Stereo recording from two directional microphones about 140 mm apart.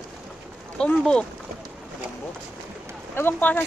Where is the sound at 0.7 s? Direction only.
5° left (ahead or behind).